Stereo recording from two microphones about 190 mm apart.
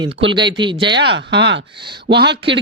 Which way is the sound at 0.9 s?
65° right (ahead or behind).